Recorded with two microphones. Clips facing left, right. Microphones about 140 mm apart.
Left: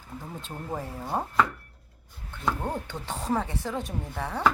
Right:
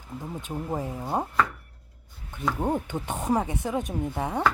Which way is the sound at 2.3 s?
15° right (ahead or behind).